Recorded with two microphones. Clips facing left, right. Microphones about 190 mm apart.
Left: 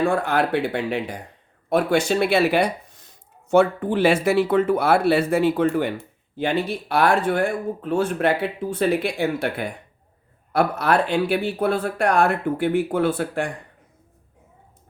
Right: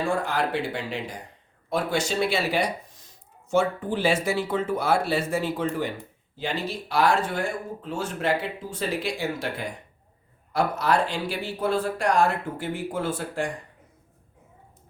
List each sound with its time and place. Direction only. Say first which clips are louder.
0.0 s speech: left 5 dB; 60° left (ahead or behind)